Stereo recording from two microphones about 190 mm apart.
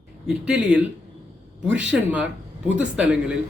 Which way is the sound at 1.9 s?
5° right (ahead or behind).